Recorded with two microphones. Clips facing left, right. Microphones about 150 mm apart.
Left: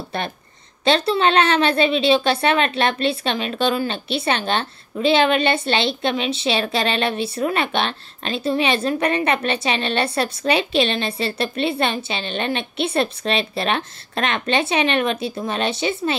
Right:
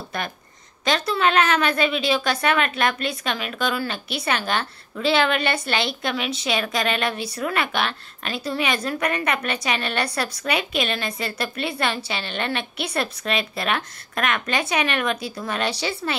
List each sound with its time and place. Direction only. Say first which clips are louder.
0.1 s a woman's voice: left 3 dB; 30° left (ahead or behind)